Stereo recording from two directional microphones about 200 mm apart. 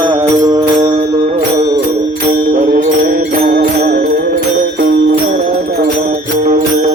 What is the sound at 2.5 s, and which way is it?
Music, 45° right (ahead or behind).